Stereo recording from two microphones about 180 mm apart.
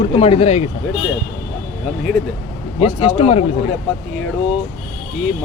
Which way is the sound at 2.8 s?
35° left (ahead or behind).